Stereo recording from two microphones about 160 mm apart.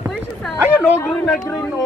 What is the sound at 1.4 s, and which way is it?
Speech, 20° left (ahead or behind).